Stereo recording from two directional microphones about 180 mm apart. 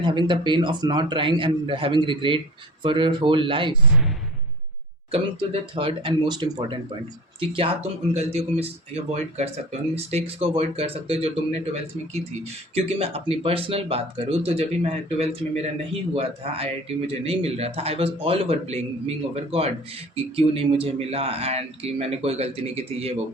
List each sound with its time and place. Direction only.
0.0 s a man's voice: 25° right (ahead or behind)
5.1 s a man's voice: 30° right (ahead or behind)
9.9 s speech: 35° right (ahead or behind)